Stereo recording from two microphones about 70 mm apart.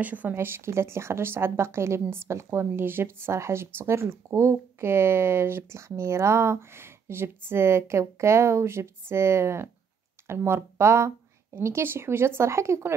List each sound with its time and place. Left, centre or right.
0.0 s a woman's voice: right